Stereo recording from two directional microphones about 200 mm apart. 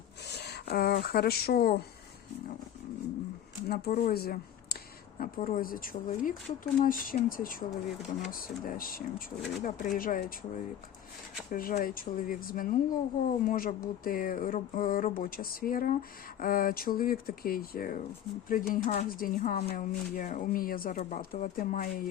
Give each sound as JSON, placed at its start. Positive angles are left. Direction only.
{"t": 0.3, "sound": "speech", "side_deg": 55}
{"t": 3.7, "sound": "speech", "side_deg": 50}